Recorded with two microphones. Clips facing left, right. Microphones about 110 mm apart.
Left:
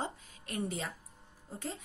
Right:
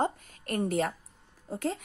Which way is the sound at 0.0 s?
55° right (ahead or behind).